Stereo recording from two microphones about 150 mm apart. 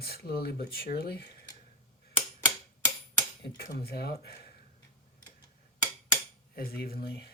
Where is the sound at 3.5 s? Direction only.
90° left.